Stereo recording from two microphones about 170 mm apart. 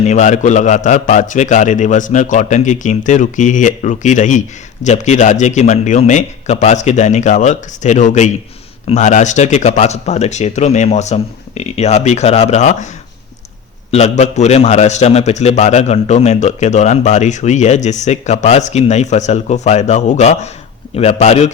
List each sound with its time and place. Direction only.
0.0 s a man's voice: 45° left (ahead or behind)
13.9 s a man's voice: 40° left (ahead or behind)